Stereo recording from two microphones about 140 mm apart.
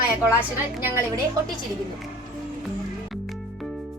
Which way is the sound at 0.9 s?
20° right (ahead or behind).